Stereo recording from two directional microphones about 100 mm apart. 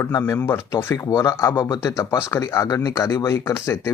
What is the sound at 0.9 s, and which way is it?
Speech, 35° left (ahead or behind).